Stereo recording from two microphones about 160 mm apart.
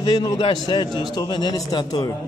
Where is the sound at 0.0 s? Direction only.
25° left (ahead or behind).